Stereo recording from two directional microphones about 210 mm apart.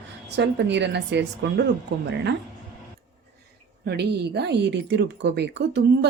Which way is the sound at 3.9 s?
50° right (ahead or behind).